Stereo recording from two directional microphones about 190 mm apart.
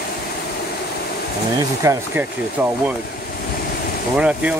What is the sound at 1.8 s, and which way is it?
Speech, 15° right (ahead or behind).